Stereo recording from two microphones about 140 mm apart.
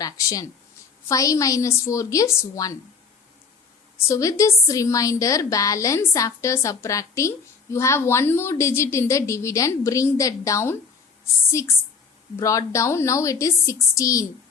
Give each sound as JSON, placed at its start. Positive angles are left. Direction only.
{"t": 0.0, "sound": "a woman's voice", "side_deg": 25}
{"t": 4.1, "sound": "a woman's voice", "side_deg": 25}
{"t": 12.4, "sound": "a woman's voice", "side_deg": 20}